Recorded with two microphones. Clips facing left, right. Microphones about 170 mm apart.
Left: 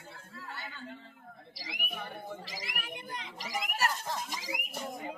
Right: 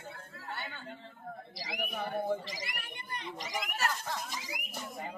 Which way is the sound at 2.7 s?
90° left.